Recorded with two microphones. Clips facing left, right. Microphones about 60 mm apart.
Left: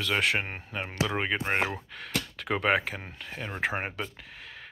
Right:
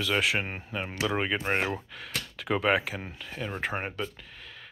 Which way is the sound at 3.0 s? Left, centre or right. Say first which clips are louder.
Right 2 dB; centre.